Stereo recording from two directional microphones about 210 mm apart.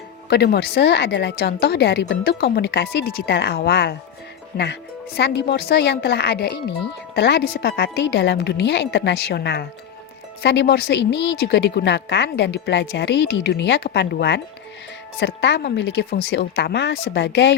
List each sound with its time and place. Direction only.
0.3 s a woman's voice: 50° left (ahead or behind)